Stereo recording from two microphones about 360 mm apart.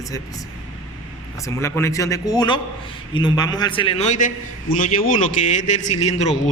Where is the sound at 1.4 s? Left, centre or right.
Centre.